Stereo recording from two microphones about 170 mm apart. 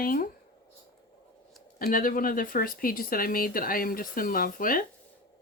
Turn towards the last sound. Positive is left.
turn(degrees=55)  # may be behind; listen again after turning